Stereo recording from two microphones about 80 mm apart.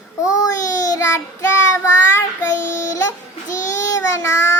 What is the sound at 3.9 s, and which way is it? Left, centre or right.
Child singing, left.